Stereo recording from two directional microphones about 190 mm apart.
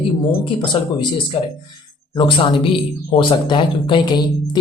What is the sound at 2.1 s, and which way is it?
Speech, 25° left (ahead or behind).